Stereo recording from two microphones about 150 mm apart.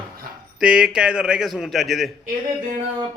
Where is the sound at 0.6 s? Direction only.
5° right (ahead or behind).